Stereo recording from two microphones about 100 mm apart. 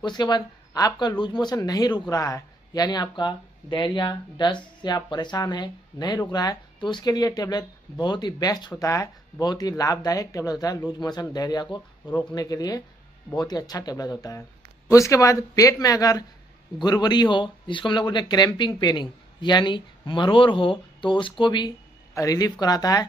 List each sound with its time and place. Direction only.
0.0 s speech: 45° left (ahead or behind)
22.1 s speech: 35° left (ahead or behind)